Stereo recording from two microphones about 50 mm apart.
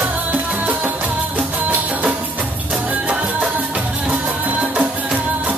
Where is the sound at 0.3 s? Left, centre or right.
Right.